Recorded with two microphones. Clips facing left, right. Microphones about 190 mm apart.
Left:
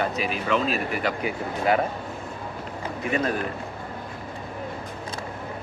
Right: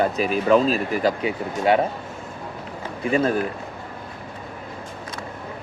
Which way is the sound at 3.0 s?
30° right (ahead or behind).